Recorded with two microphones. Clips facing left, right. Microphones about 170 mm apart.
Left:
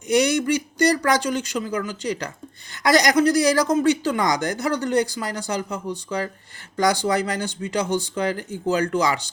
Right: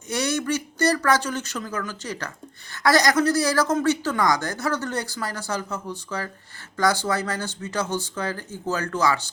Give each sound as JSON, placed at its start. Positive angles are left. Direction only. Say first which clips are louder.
{"t": 0.1, "sound": "speech", "louder": "left 6 dB", "side_deg": 15}